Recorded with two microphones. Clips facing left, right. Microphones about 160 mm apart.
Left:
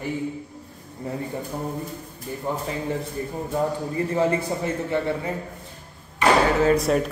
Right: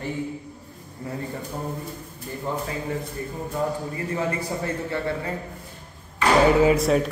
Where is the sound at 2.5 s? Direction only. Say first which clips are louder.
Left 1 dB; 15° left (ahead or behind).